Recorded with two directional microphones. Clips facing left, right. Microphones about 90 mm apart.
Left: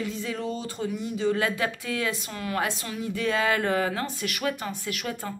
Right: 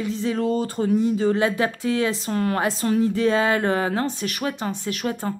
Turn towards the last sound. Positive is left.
turn(degrees=-35)  # may be behind; listen again after turning